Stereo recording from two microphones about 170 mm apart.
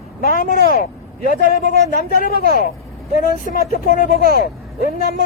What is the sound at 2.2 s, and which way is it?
Speech, 60° left (ahead or behind).